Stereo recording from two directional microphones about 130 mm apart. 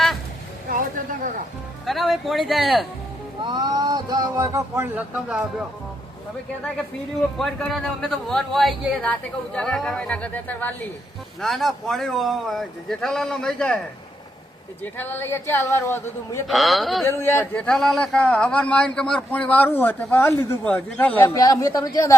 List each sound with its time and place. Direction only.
1.9 s speech: centre (ahead or behind)
3.4 s speech: 35° right (ahead or behind)
4.9 s speech: 5° right (ahead or behind)
7.3 s a man's voice: centre (ahead or behind)
11.3 s speech: centre (ahead or behind)
14.9 s speech: 15° left (ahead or behind)
16.5 s speech: centre (ahead or behind)
17.1 s a man's voice: 20° left (ahead or behind)
21.2 s speech: 30° left (ahead or behind)